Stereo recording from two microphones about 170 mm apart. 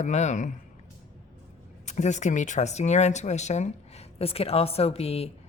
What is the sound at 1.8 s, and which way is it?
Speech, 45° left (ahead or behind).